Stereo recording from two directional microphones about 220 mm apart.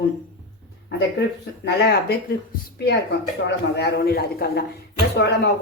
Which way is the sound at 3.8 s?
50° left (ahead or behind).